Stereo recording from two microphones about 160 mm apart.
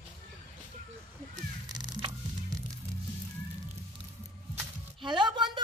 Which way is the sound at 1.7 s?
25° right (ahead or behind).